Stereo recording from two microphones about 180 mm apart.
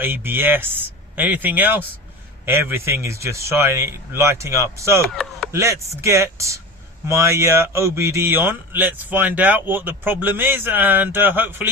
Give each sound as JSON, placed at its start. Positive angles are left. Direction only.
{"t": 0.0, "sound": "speech", "side_deg": -10}
{"t": 5.0, "sound": "chop", "side_deg": 0}
{"t": 5.5, "sound": "speech", "side_deg": -15}